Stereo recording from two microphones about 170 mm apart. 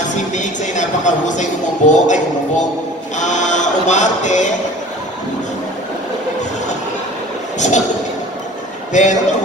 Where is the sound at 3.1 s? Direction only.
45° left (ahead or behind).